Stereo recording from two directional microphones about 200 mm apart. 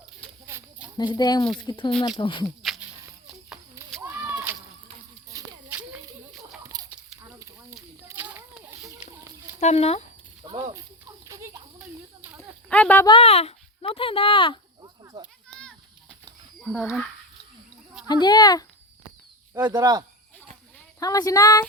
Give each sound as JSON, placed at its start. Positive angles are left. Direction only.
{"t": 0.4, "sound": "a sound", "side_deg": -10}
{"t": 0.9, "sound": "speech", "side_deg": 20}
{"t": 4.0, "sound": "a sound", "side_deg": -10}
{"t": 8.0, "sound": "children playing", "side_deg": -10}
{"t": 9.6, "sound": "speech", "side_deg": 35}
{"t": 10.4, "sound": "a sound", "side_deg": -20}
{"t": 12.6, "sound": "speech", "side_deg": 5}
{"t": 13.1, "sound": "speech", "side_deg": 30}
{"t": 14.8, "sound": "cricket", "side_deg": -20}
{"t": 15.2, "sound": "a sound", "side_deg": 5}
{"t": 18.1, "sound": "speech", "side_deg": 20}
{"t": 19.5, "sound": "speech", "side_deg": -15}
{"t": 21.0, "sound": "speech", "side_deg": 15}